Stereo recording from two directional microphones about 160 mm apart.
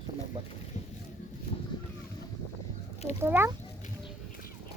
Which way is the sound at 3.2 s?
15° right (ahead or behind).